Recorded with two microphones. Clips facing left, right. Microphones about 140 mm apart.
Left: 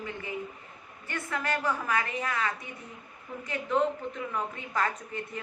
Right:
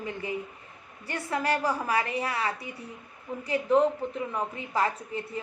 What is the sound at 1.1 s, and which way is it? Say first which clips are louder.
A woman's voice: right 4 dB; 35° right (ahead or behind).